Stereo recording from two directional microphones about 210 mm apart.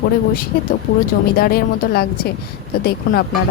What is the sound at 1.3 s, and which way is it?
Speech, 45° left (ahead or behind).